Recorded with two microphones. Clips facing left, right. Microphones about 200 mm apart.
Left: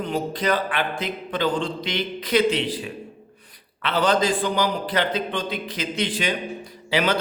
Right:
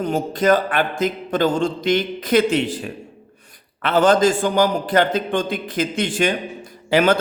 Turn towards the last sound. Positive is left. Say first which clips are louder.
# right 6 dB
turn(degrees=-50)  # may be behind; listen again after turning